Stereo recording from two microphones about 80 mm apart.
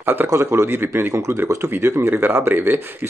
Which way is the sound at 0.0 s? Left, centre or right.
Right.